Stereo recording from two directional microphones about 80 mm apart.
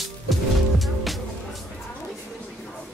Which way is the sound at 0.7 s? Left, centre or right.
Centre.